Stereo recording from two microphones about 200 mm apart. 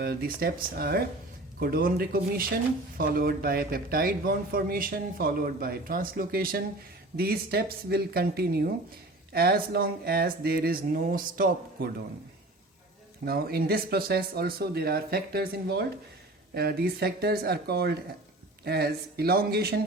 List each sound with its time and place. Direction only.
0.0 s a man's voice: 50° right (ahead or behind)
13.2 s a man's voice: 50° right (ahead or behind)